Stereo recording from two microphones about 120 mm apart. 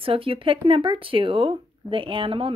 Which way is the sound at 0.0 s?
50° right (ahead or behind).